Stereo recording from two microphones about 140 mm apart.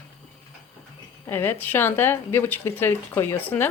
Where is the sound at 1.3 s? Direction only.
15° left (ahead or behind).